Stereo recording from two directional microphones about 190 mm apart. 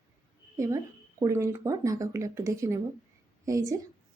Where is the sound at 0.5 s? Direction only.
15° right (ahead or behind).